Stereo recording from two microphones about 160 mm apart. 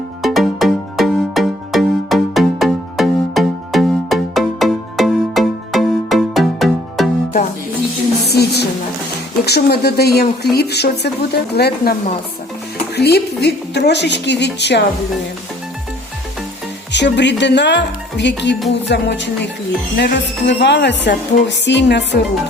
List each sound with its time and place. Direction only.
0.2 s music: centre (ahead or behind)
8.3 s a sound: 90° left
9.5 s speech: 80° left
13.0 s speech: 90° left
16.9 s speech: 90° left